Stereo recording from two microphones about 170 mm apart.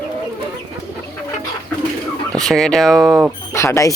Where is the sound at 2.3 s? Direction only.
Centre (ahead or behind).